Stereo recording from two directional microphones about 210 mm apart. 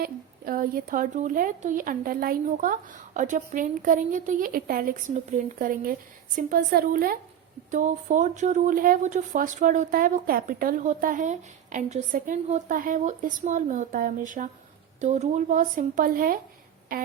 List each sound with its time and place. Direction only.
0.0 s speech: 40° right (ahead or behind)